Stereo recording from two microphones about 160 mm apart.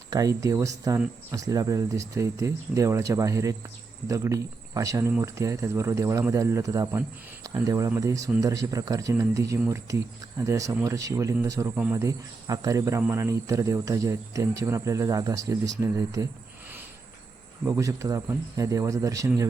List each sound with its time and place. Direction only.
0.1 s speech: 20° right (ahead or behind)
17.7 s speech: 20° right (ahead or behind)